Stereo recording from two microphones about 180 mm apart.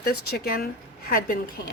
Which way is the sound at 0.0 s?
55° left (ahead or behind).